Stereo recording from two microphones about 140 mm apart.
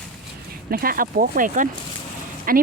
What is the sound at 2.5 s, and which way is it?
Speech, 90° right.